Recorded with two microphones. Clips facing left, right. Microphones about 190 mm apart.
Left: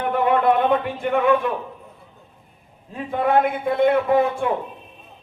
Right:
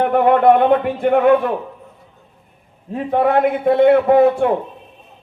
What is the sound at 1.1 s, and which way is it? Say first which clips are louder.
Speech: right 5 dB; 55° right (ahead or behind).